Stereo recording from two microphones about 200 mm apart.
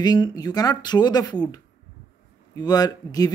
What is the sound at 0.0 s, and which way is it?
Speech, 20° left (ahead or behind).